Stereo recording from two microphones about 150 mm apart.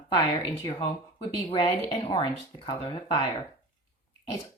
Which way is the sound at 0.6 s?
35° left (ahead or behind).